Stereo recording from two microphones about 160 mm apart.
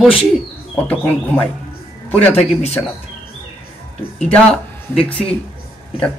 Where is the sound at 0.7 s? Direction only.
10° left (ahead or behind).